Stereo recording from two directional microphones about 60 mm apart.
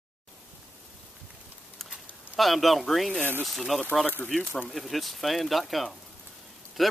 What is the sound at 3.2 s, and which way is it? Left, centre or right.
Speech, right.